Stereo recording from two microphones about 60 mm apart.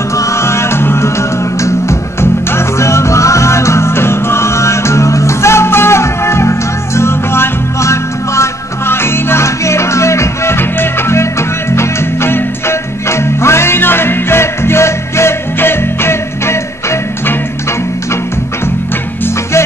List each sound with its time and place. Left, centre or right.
0.1 s music: left
1.6 s music: left